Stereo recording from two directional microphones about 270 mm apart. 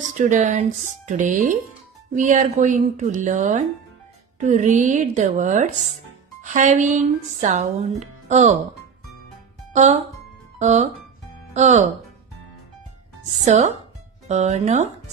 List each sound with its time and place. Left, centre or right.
0.2 s speech: right
9.7 s music: right
10.6 s speech: right
13.4 s speech: right